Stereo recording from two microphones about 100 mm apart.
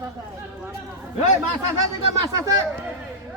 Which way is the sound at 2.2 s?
35° right (ahead or behind).